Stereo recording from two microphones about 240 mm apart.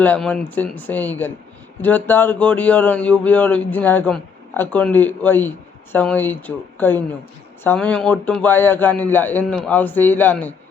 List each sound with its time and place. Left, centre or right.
0.0 s speech: centre